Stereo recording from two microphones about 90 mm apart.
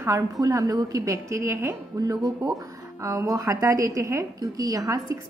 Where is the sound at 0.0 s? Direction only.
35° right (ahead or behind).